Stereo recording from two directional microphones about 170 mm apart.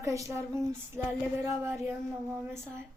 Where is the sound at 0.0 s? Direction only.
20° right (ahead or behind).